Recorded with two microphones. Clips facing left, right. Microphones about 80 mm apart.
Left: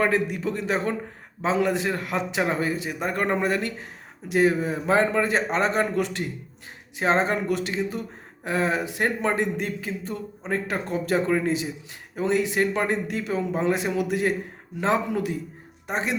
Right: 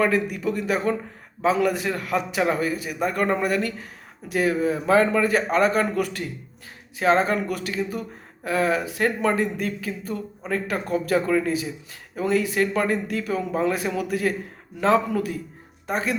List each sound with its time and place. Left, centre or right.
0.0 s speech: left